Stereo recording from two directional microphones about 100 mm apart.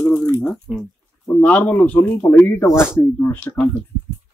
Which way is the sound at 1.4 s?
15° left (ahead or behind).